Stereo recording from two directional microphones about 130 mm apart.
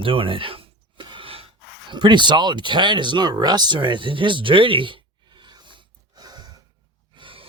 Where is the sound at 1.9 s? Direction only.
35° right (ahead or behind).